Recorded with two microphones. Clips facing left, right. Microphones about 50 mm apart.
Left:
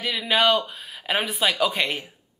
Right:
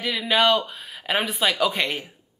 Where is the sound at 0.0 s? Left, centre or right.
Centre.